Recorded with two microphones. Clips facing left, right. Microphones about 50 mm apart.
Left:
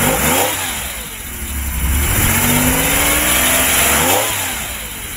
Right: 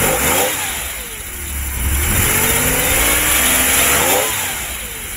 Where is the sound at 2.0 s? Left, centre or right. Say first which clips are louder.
Left 1 dB; left.